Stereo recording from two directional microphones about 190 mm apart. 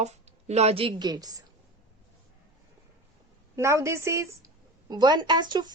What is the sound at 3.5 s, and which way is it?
A woman's voice, 15° right (ahead or behind).